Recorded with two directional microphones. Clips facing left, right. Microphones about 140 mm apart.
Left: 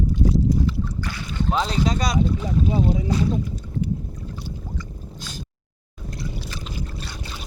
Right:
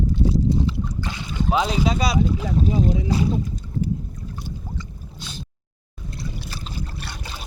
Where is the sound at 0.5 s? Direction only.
25° right (ahead or behind).